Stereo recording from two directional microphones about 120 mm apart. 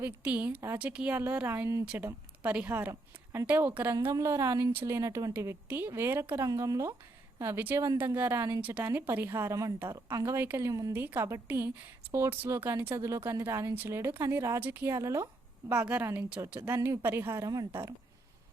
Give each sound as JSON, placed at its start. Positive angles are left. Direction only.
{"t": 0.0, "sound": "speech", "side_deg": -15}
{"t": 1.8, "sound": "speech", "side_deg": -10}
{"t": 10.1, "sound": "speech", "side_deg": -30}
{"t": 10.3, "sound": "speech", "side_deg": -20}
{"t": 10.7, "sound": "speech", "side_deg": -30}
{"t": 10.9, "sound": "speech", "side_deg": -15}